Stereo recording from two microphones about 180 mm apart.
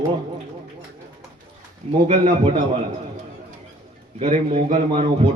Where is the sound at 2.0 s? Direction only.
30° right (ahead or behind).